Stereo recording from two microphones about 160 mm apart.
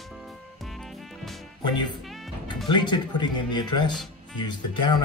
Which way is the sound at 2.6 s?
30° left (ahead or behind).